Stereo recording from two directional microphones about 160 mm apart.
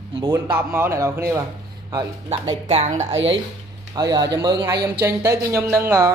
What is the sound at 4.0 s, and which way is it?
A woman's voice, 25° right (ahead or behind).